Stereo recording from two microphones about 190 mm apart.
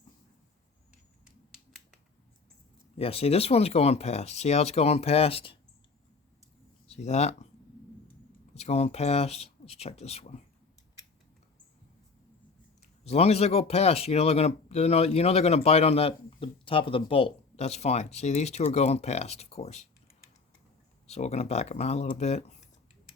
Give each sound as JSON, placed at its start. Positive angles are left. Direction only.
{"t": 3.0, "sound": "speech", "side_deg": 30}
{"t": 6.8, "sound": "speech", "side_deg": 35}
{"t": 8.5, "sound": "speech", "side_deg": 35}
{"t": 13.1, "sound": "speech", "side_deg": 35}
{"t": 21.1, "sound": "speech", "side_deg": 35}